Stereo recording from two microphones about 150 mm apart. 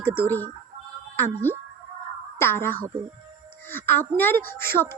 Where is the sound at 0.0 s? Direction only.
15° left (ahead or behind).